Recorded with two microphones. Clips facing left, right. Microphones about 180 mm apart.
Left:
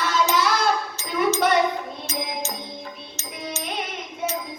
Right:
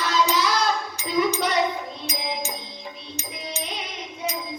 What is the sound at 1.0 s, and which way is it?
Music, 15° right (ahead or behind).